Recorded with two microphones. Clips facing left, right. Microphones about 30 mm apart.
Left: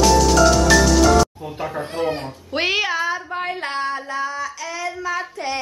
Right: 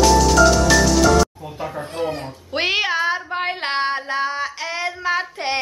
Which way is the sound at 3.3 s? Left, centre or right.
Right.